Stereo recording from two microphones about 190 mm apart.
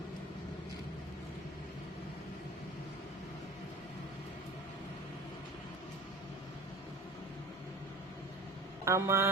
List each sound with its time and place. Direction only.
8.8 s a man's voice: 15° right (ahead or behind)